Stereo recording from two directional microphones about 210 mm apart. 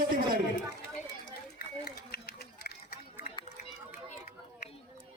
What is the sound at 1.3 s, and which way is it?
Run, 45° left (ahead or behind).